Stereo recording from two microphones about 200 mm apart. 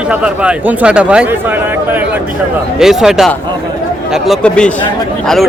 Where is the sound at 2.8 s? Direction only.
Centre (ahead or behind).